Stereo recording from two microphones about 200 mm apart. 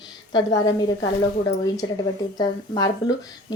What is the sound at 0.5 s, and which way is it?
Speech, 20° left (ahead or behind).